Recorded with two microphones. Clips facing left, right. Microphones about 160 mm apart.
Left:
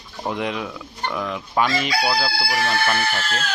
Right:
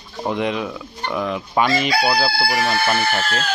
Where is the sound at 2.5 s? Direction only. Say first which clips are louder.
Left 1 dB; 30° right (ahead or behind).